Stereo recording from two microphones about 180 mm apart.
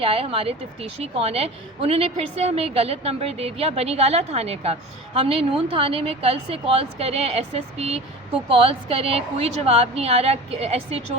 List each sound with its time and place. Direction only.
0.0 s a woman's voice: 30° right (ahead or behind)